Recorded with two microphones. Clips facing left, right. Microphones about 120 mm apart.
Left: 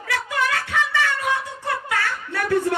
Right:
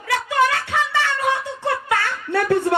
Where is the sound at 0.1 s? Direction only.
30° right (ahead or behind).